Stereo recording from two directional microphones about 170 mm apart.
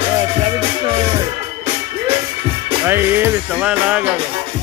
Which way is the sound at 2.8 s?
15° right (ahead or behind).